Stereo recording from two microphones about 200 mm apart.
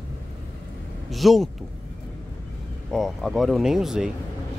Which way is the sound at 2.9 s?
Centre (ahead or behind).